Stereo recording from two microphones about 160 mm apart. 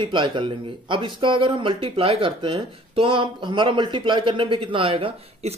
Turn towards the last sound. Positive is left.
turn(degrees=-35)  # may be behind; listen again after turning